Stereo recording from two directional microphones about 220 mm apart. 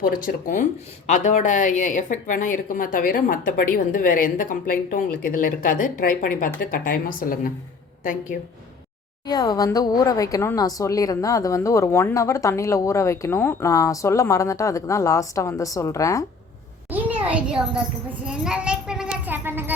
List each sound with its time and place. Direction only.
0.0 s speech: 40° left (ahead or behind)
9.2 s a woman's voice: 20° left (ahead or behind)
16.9 s a child's voice: 5° right (ahead or behind)
18.3 s a sound: 5° right (ahead or behind)